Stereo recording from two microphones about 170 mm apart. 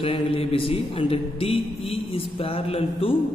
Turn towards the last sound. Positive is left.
turn(degrees=35)  # may be behind; listen again after turning